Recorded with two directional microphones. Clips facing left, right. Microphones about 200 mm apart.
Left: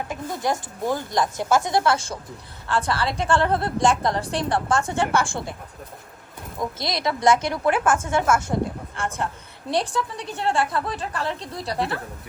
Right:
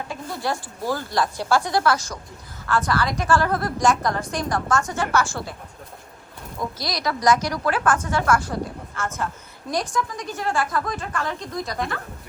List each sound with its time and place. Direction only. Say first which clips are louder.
0.1 s a woman's voice: left 2 dB; 20° left (ahead or behind)
6.6 s a woman's voice: left 2 dB; 25° left (ahead or behind)